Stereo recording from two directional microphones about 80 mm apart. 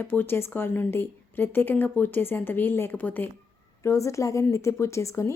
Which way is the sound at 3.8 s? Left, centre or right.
Left.